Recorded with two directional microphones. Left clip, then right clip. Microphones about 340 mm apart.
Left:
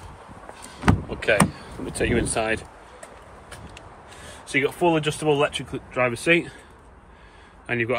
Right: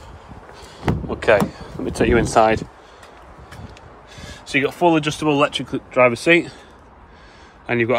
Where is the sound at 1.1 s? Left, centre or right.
Centre.